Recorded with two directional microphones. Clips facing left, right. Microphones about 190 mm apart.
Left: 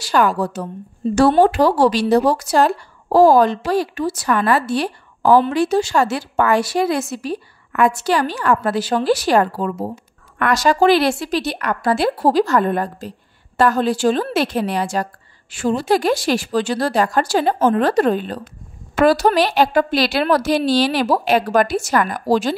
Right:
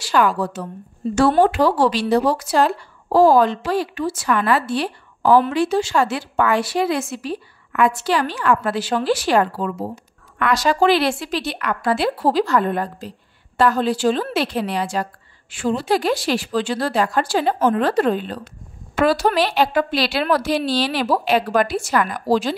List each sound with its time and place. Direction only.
0.0 s a woman's voice: 40° left (ahead or behind)